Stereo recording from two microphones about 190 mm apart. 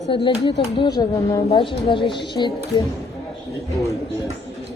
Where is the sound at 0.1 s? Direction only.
25° left (ahead or behind).